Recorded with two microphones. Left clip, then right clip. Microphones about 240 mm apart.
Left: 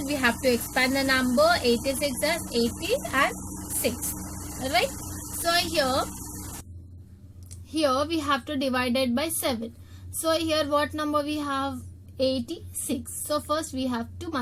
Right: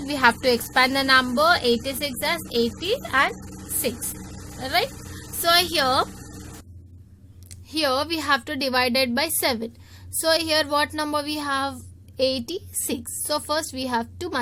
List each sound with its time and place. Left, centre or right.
0.1 s a woman's voice: right
5.5 s a woman's voice: right
7.8 s a woman's voice: right